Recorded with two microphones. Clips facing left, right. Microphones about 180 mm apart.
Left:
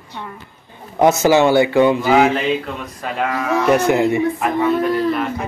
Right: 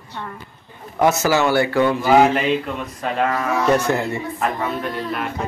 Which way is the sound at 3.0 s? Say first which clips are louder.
Right 1 dB; 5° left (ahead or behind).